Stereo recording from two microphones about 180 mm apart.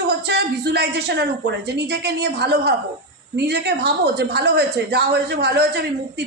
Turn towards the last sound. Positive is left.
turn(degrees=-65)  # may be behind; listen again after turning